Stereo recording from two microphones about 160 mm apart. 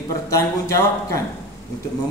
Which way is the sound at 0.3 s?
20° left (ahead or behind).